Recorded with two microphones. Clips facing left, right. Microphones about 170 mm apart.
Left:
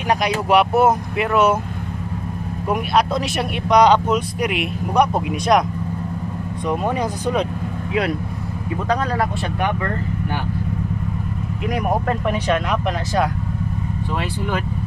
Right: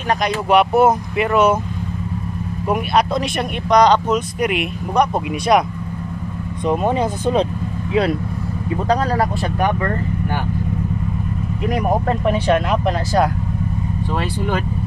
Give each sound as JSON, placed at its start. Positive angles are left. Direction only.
{"t": 0.5, "sound": "speech", "side_deg": 0}
{"t": 2.7, "sound": "speech", "side_deg": 0}
{"t": 6.6, "sound": "speech", "side_deg": -25}
{"t": 8.8, "sound": "speech", "side_deg": -35}
{"t": 12.1, "sound": "speech", "side_deg": -30}